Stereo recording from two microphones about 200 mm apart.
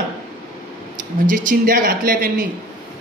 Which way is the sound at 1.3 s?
40° right (ahead or behind).